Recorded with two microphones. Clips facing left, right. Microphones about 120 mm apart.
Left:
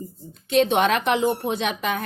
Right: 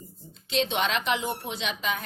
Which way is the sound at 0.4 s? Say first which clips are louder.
Left 8 dB; 55° left (ahead or behind).